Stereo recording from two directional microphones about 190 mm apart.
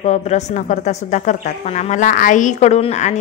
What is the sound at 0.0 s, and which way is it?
Speech, 35° left (ahead or behind).